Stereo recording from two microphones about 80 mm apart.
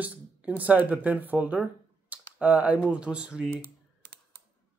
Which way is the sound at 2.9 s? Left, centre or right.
Centre.